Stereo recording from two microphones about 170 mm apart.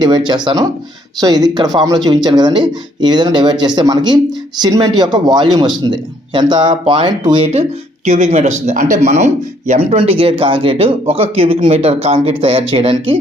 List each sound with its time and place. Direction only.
0.0 s a man's voice: 25° right (ahead or behind)
8.0 s speech: 45° right (ahead or behind)